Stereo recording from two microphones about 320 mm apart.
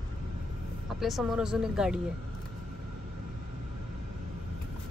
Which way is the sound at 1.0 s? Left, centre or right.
Centre.